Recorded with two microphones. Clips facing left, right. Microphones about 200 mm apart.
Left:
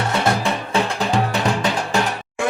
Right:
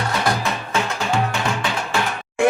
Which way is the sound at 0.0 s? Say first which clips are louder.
Left 2 dB; 30° left (ahead or behind).